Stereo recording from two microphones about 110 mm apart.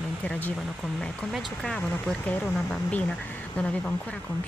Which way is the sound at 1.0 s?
Centre (ahead or behind).